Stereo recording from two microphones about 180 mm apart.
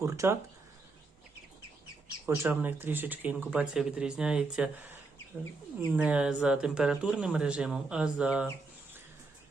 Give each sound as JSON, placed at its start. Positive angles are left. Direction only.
{"t": 0.0, "sound": "speech", "side_deg": -15}
{"t": 2.2, "sound": "speech", "side_deg": -10}
{"t": 5.9, "sound": "speech", "side_deg": -5}